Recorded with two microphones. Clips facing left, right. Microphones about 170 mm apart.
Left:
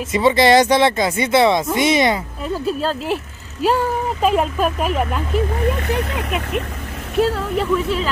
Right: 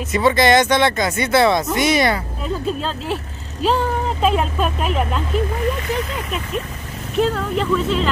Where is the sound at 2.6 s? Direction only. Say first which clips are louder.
Left 2 dB; 5° left (ahead or behind).